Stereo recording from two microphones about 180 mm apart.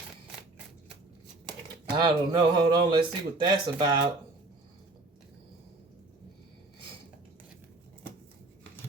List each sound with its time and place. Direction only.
2.0 s speech: 25° right (ahead or behind)